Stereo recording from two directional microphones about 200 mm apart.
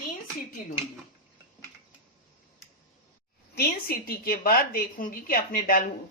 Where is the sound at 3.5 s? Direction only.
50° left (ahead or behind).